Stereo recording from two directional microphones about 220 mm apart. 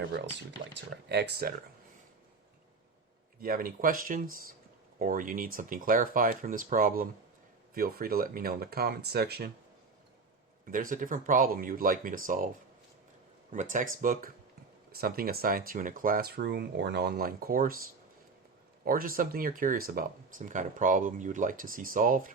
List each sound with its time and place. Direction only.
1.0 s speech: 50° right (ahead or behind)
3.4 s speech: 40° right (ahead or behind)
10.7 s speech: 35° right (ahead or behind)
13.5 s speech: 35° right (ahead or behind)
18.9 s speech: 40° right (ahead or behind)